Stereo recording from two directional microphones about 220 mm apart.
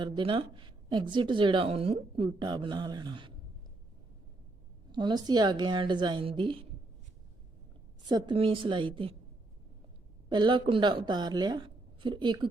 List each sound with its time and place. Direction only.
0.0 s speech: 20° right (ahead or behind)
4.9 s speech: 20° right (ahead or behind)
8.0 s speech: 20° right (ahead or behind)
10.2 s speech: 20° right (ahead or behind)